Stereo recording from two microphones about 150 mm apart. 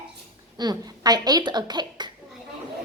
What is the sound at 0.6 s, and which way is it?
A woman's voice, 25° right (ahead or behind).